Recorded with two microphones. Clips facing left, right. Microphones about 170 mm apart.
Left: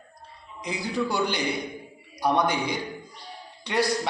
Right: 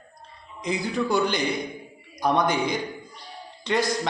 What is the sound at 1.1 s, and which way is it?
Speech, 15° left (ahead or behind).